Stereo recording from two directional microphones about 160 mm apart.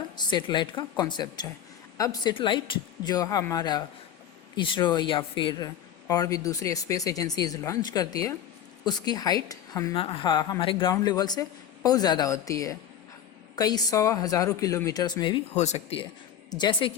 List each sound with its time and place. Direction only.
0.2 s speech: 30° left (ahead or behind)
15.5 s speech: 45° left (ahead or behind)
16.5 s speech: 25° left (ahead or behind)